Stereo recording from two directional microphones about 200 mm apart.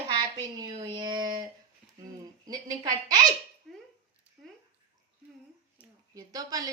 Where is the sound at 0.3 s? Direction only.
20° right (ahead or behind).